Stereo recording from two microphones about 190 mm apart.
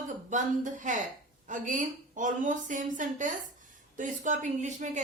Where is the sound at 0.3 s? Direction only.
40° right (ahead or behind).